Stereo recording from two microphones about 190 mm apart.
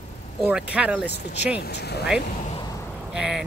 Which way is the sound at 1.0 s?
60° left (ahead or behind).